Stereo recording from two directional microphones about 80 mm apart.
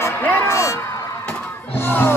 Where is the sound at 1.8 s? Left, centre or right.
Left.